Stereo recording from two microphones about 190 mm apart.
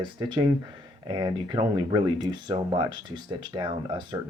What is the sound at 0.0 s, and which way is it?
Speech, 25° right (ahead or behind).